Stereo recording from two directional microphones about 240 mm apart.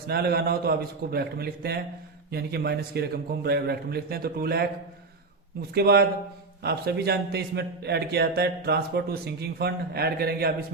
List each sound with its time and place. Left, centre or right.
0.1 s a man's voice: right
5.7 s a man's voice: right